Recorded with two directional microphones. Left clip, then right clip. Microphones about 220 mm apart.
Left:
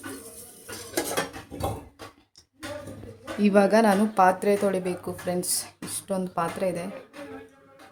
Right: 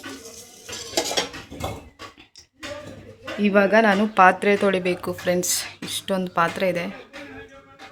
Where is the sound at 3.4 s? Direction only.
Centre (ahead or behind).